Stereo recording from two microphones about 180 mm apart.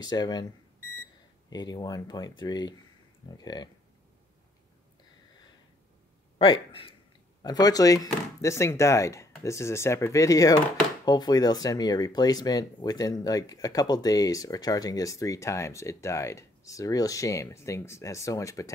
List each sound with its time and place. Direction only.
0.0 s speech: 25° left (ahead or behind)
1.5 s speech: 20° left (ahead or behind)
6.3 s a man's voice: 30° left (ahead or behind)